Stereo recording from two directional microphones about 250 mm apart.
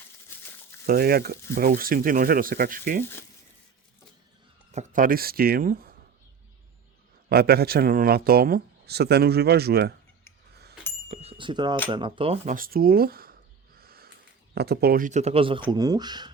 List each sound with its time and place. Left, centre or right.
0.9 s speech: right
4.7 s speech: right
7.3 s speech: right
11.1 s speech: right
13.7 s owl: right
14.5 s speech: right; by 16.3 s centre